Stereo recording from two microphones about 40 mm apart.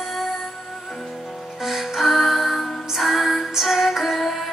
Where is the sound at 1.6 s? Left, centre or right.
Centre.